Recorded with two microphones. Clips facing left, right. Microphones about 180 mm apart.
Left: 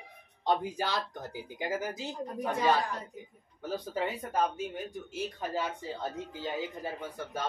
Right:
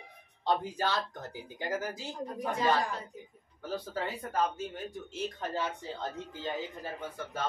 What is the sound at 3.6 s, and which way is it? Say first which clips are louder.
Speech: left 2 dB; 20° left (ahead or behind).